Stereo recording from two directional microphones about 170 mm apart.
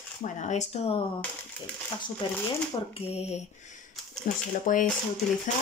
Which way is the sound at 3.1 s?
40° left (ahead or behind).